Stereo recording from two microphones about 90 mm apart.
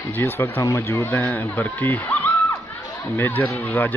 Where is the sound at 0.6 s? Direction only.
30° left (ahead or behind).